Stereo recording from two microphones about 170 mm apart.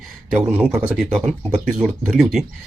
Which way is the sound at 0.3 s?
10° right (ahead or behind).